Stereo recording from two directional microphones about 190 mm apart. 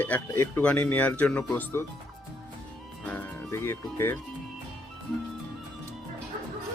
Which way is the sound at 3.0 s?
15° left (ahead or behind).